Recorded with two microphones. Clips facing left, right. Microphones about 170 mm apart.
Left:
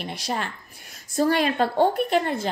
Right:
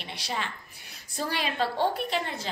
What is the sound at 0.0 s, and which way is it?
A woman's voice, 45° left (ahead or behind).